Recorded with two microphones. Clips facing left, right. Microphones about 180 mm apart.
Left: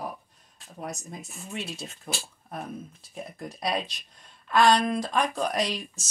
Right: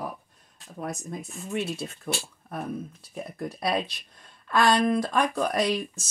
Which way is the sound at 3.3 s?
55° right (ahead or behind).